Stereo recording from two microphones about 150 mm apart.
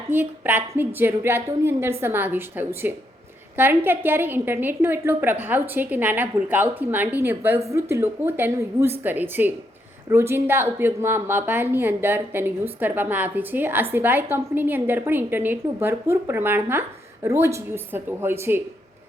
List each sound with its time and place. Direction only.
0.1 s a woman's voice: 15° right (ahead or behind)